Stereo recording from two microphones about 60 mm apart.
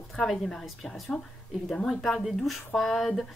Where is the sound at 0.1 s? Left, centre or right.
Centre.